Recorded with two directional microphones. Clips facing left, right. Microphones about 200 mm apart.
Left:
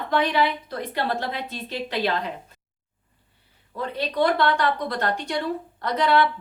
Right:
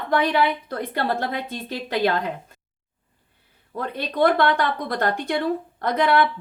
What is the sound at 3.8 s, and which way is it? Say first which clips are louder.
A woman's voice: right 1 dB; 50° right (ahead or behind).